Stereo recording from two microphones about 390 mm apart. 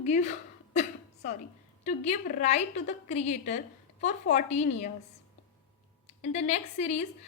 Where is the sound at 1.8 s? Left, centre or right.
Centre.